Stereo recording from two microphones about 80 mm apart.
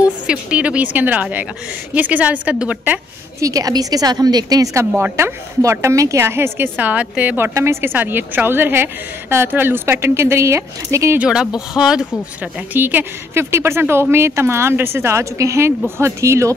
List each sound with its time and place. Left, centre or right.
0.3 s a woman's voice: centre
3.3 s a woman's voice: right
5.1 s speech: right
6.8 s a woman's voice: centre
7.5 s a woman's voice: right
11.1 s a woman's voice: centre
12.7 s speech: right